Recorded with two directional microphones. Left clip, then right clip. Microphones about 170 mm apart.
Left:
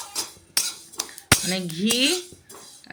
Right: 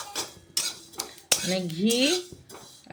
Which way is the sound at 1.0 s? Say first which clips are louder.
Left 4 dB; centre (ahead or behind).